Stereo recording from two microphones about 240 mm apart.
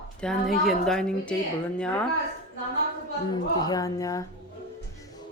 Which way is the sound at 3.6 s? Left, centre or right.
Centre.